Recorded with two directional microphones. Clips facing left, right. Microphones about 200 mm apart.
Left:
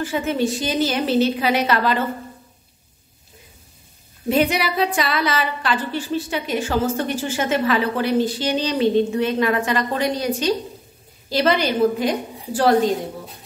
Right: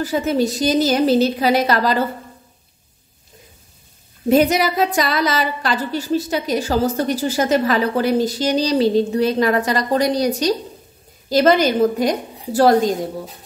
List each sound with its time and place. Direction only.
0.0 s a woman's voice: 40° right (ahead or behind)
4.3 s a woman's voice: 40° right (ahead or behind)